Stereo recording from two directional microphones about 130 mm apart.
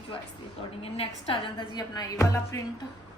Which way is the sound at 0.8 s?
45° left (ahead or behind).